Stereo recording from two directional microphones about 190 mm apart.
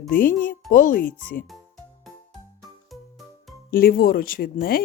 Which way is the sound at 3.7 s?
50° left (ahead or behind).